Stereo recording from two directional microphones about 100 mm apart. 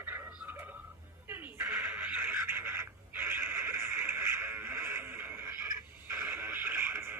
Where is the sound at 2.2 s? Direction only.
20° right (ahead or behind).